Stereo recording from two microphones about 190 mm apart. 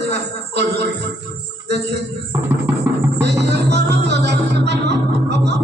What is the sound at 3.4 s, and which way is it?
Music, 65° right (ahead or behind).